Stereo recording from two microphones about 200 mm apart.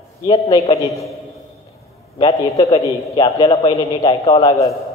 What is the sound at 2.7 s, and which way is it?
A man's voice, 30° left (ahead or behind).